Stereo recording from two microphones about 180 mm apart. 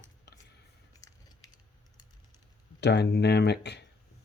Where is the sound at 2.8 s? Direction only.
70° left (ahead or behind).